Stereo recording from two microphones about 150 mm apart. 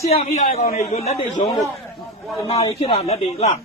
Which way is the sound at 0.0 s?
45° left (ahead or behind).